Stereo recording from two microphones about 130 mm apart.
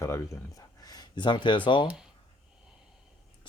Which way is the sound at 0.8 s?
30° left (ahead or behind).